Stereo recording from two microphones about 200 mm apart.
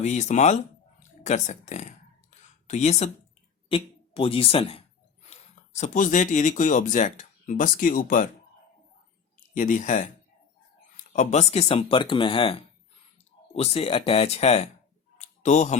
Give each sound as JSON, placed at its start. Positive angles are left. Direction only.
{"t": 0.0, "sound": "speech", "side_deg": 35}
{"t": 9.6, "sound": "speech", "side_deg": 40}
{"t": 11.1, "sound": "speech", "side_deg": 35}
{"t": 15.2, "sound": "a sound", "side_deg": 35}